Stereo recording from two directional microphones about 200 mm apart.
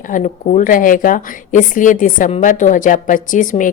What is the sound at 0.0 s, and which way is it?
A woman's voice, 40° left (ahead or behind).